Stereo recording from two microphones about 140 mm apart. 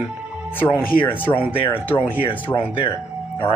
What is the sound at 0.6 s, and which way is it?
Speech, 15° left (ahead or behind).